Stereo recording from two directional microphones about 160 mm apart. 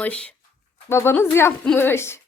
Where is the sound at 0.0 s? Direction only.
5° left (ahead or behind).